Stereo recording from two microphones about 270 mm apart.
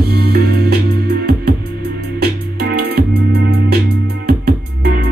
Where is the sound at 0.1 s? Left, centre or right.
Right.